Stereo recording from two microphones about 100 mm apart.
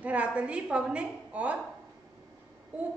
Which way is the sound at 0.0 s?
15° right (ahead or behind).